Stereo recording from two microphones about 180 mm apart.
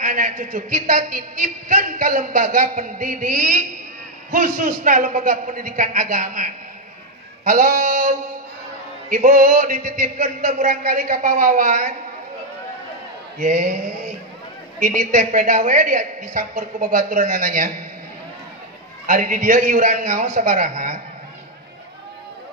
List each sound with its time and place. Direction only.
0.0 s a man's voice: 45° right (ahead or behind)
13.4 s a man's voice: 45° right (ahead or behind)
14.8 s a man's voice: 45° right (ahead or behind)
19.0 s a man's voice: 50° right (ahead or behind)